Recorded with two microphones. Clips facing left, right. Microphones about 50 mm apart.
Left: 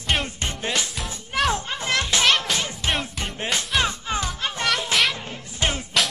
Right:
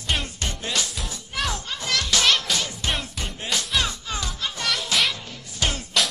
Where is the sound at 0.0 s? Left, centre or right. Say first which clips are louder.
Left 3 dB; centre.